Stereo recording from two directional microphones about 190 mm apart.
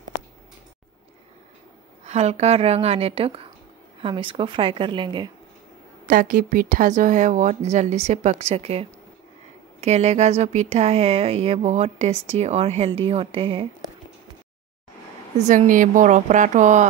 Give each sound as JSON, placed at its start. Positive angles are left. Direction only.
{"t": 2.0, "sound": "a woman's voice", "side_deg": -35}
{"t": 6.0, "sound": "a woman's voice", "side_deg": -45}
{"t": 15.3, "sound": "speech", "side_deg": -40}